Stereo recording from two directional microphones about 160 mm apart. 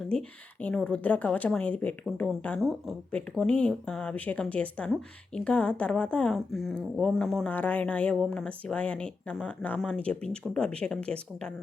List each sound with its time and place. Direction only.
0.1 s a woman's voice: 5° left (ahead or behind)